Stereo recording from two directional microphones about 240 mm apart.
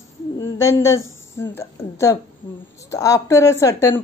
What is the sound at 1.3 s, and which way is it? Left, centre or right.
Speech, centre.